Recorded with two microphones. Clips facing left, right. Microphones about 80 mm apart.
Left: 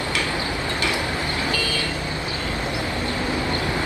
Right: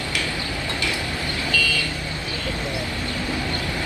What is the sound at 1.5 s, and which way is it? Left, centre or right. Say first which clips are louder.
Vehicle: even; left.